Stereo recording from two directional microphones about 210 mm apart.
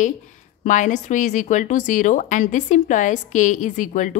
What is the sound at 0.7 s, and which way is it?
Speech, 35° left (ahead or behind).